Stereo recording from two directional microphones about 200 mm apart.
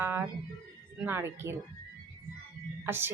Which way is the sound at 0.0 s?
10° right (ahead or behind).